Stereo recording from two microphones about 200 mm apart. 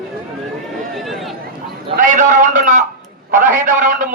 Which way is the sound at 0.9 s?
Centre (ahead or behind).